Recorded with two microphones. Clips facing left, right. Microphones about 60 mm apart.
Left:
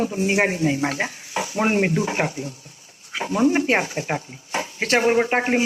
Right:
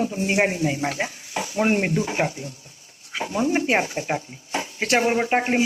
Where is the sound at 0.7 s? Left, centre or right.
Left.